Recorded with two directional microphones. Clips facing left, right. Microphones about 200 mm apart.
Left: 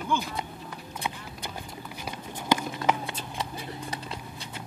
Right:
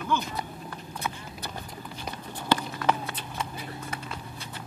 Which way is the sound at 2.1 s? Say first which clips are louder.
Even; 10° left (ahead or behind).